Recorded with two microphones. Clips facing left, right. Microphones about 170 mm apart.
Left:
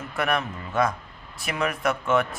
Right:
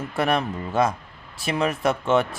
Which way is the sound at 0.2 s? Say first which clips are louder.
Right 3 dB; 30° right (ahead or behind).